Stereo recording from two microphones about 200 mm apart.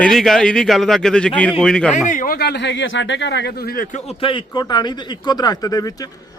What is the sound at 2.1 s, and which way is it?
Speech, 45° left (ahead or behind).